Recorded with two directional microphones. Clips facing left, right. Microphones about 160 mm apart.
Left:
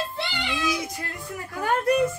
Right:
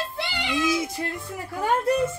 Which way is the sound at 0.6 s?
25° right (ahead or behind).